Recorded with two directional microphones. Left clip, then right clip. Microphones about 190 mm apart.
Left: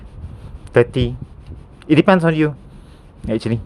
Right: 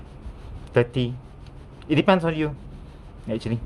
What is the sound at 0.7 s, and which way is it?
Speech, 40° left (ahead or behind).